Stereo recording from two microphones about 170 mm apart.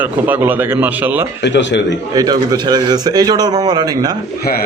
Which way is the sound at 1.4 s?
90° left.